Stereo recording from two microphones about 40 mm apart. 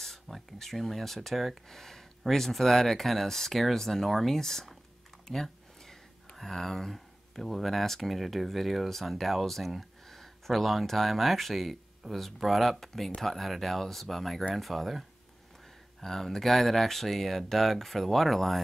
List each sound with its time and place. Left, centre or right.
0.0 s speech: centre
1.7 s speech: centre